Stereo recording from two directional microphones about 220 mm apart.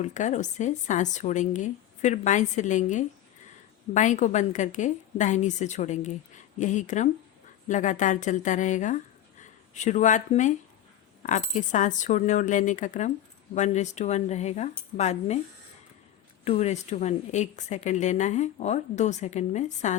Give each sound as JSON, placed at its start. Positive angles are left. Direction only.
{"t": 0.0, "sound": "a woman's voice", "side_deg": 35}
{"t": 16.4, "sound": "a woman's voice", "side_deg": 30}